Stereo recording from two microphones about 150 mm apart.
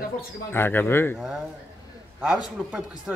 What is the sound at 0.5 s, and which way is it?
Speech, 15° left (ahead or behind).